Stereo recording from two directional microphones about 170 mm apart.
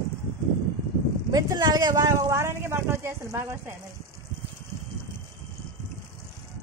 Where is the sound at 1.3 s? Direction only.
25° right (ahead or behind).